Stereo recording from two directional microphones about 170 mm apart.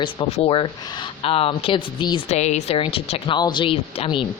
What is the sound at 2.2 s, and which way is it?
Speech, 40° left (ahead or behind).